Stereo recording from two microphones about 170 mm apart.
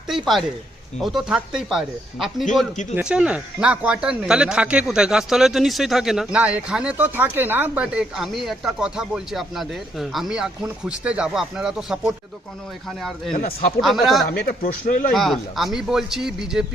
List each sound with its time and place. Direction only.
0.1 s speech: centre (ahead or behind)
14.3 s a man's voice: 55° left (ahead or behind)
15.1 s speech: centre (ahead or behind)